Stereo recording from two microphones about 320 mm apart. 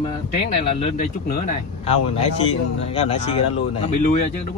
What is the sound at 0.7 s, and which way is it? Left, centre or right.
Speech, left.